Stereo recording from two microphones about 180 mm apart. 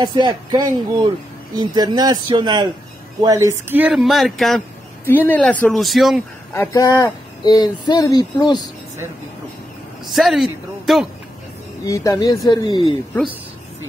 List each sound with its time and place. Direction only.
0.0 s speech: 25° right (ahead or behind); by 4.6 s centre (ahead or behind)
5.0 s speech: 10° left (ahead or behind)
6.5 s speech: 15° left (ahead or behind)
10.1 s speech: centre (ahead or behind)
11.8 s speech: 20° left (ahead or behind)